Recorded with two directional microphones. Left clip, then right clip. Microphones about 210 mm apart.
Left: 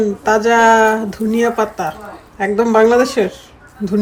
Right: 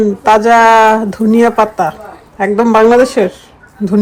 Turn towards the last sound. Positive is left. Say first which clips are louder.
# right 5 dB
turn(degrees=0)  # may be behind; listen again after turning